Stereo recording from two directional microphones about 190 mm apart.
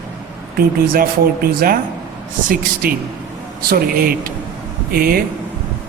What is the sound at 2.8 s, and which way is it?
Speech, 50° right (ahead or behind).